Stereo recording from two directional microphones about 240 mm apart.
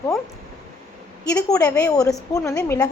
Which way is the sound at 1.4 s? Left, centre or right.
Centre.